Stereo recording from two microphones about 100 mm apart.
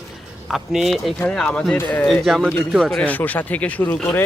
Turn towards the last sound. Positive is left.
turn(degrees=20)  # may be behind; listen again after turning